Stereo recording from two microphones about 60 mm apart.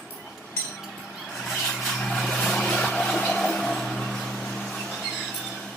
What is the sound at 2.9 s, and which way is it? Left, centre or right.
Music, centre.